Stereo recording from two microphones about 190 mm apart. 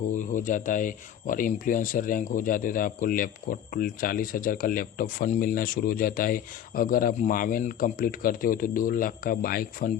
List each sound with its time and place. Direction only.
0.1 s speech: 40° left (ahead or behind)